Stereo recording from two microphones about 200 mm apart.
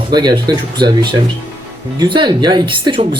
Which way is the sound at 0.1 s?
20° right (ahead or behind).